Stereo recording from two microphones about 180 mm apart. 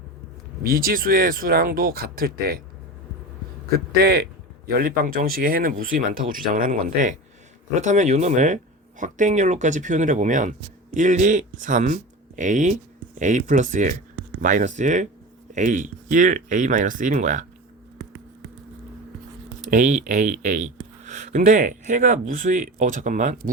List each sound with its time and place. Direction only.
0.6 s speech: 55° right (ahead or behind)
4.0 s speech: 60° right (ahead or behind); by 17.4 s 45° right (ahead or behind)
19.6 s speech: 45° right (ahead or behind)